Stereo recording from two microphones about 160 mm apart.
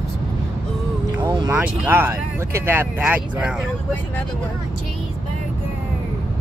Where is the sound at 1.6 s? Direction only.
10° right (ahead or behind).